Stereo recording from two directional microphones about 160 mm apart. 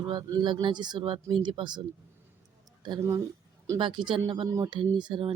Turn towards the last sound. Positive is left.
turn(degrees=-30)  # may be behind; listen again after turning